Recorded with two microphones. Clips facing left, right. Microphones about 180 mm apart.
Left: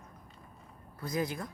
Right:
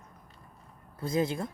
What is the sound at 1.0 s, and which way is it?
Speech, 25° right (ahead or behind).